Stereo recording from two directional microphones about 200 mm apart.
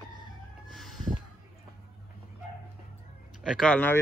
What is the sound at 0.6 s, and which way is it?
Chicken, centre (ahead or behind).